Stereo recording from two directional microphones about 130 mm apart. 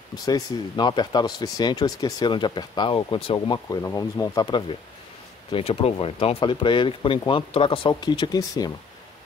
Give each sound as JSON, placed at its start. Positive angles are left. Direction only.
{"t": 0.1, "sound": "speech", "side_deg": 30}
{"t": 5.5, "sound": "speech", "side_deg": 50}
{"t": 7.9, "sound": "speech", "side_deg": 30}